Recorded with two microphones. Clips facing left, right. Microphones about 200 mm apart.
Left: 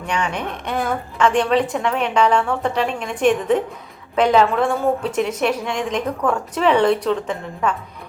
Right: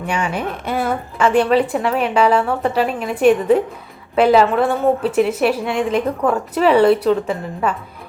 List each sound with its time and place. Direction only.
0.0 s a woman's voice: 5° right (ahead or behind)